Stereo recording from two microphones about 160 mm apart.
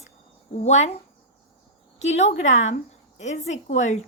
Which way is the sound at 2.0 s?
45° left (ahead or behind).